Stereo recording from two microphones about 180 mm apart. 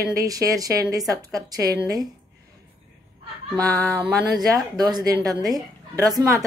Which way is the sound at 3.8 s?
20° right (ahead or behind).